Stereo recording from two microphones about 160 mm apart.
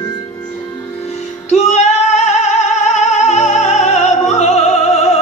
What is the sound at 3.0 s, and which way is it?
Music, 45° left (ahead or behind).